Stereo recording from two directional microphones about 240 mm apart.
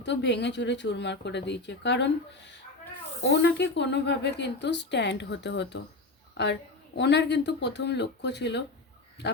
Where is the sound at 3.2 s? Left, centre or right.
Left.